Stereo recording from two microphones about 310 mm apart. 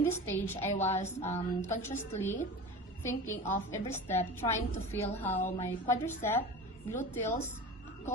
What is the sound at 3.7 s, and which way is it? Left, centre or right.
A woman's voice, centre.